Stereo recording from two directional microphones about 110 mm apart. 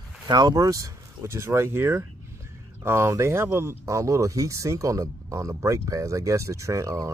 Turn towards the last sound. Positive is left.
turn(degrees=-30)  # may be behind; listen again after turning